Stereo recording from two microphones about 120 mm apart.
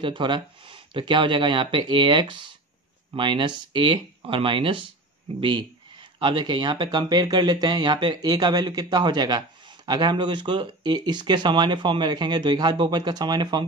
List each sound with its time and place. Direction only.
0.0 s speech: 40° right (ahead or behind)